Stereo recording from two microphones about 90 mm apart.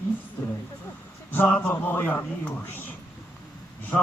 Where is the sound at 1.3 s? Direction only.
20° left (ahead or behind).